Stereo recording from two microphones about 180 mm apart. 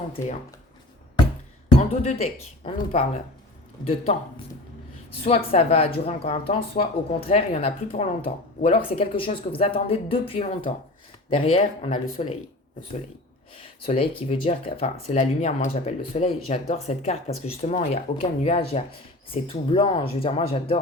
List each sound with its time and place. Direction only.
2.0 s speech: 35° left (ahead or behind)
5.2 s speech: 35° left (ahead or behind)
13.8 s speech: 35° left (ahead or behind)